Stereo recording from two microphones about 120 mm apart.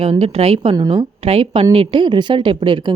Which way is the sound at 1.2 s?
50° right (ahead or behind).